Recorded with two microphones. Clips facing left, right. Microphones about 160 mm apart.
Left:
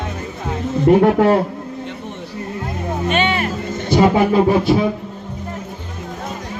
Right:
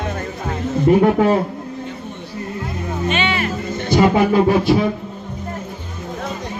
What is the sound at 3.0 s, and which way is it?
Music, 50° left (ahead or behind).